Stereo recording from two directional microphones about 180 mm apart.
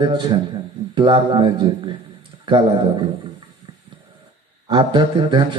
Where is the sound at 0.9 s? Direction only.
25° right (ahead or behind).